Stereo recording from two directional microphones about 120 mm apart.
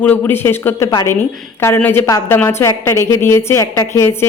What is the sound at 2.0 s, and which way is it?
A woman's voice, 30° left (ahead or behind).